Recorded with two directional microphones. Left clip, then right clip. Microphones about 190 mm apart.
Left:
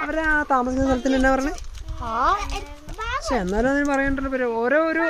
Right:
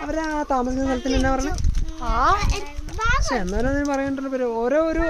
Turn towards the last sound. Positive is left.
turn(degrees=0)  # may be behind; listen again after turning